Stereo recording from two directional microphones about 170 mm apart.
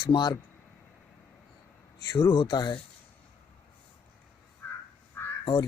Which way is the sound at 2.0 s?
25° left (ahead or behind).